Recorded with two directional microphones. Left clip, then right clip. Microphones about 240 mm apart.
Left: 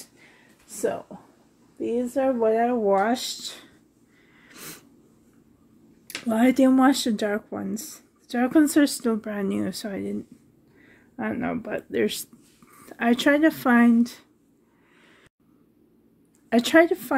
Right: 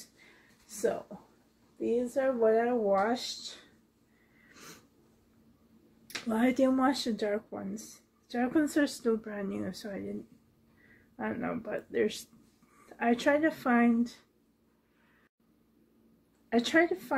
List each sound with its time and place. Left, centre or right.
2.1 s speech: left
4.5 s wheeze: left
6.0 s speech: left
11.1 s speech: left
16.4 s speech: left